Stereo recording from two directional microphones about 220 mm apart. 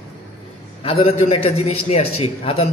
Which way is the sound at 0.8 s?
30° left (ahead or behind).